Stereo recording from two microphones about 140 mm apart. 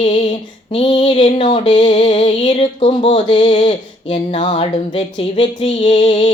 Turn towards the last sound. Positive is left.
turn(degrees=40)  # may be behind; listen again after turning